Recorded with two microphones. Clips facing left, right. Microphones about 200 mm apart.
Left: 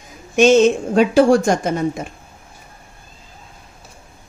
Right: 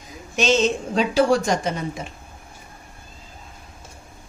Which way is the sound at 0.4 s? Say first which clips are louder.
Left 8 dB; 50° left (ahead or behind).